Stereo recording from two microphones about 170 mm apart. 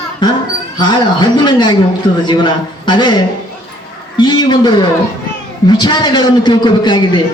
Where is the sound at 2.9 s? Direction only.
25° left (ahead or behind).